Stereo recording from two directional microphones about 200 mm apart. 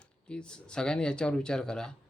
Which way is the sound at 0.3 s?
5° left (ahead or behind).